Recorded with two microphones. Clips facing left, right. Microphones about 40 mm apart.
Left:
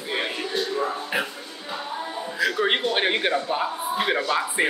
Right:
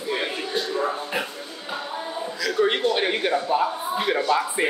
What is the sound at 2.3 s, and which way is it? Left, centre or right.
A man's voice, left.